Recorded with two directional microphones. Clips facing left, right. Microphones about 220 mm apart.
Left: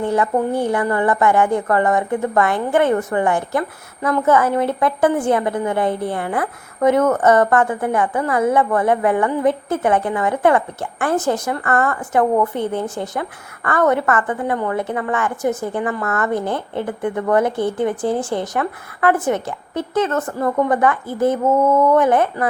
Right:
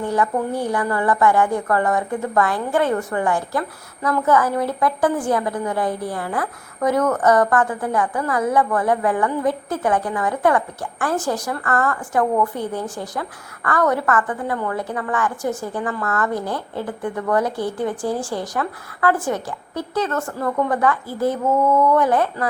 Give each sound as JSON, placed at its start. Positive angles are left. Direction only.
{"t": 0.0, "sound": "a woman's voice", "side_deg": 25}